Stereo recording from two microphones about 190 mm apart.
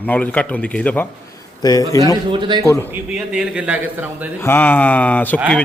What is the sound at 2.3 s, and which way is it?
Speech, 25° right (ahead or behind).